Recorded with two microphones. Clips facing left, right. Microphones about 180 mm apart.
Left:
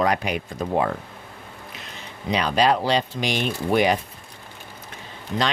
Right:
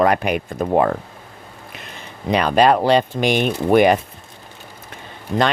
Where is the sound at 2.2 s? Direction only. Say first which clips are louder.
Right 5 dB; 55° right (ahead or behind).